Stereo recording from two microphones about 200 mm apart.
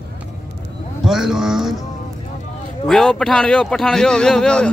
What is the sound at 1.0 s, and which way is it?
Speech, centre (ahead or behind).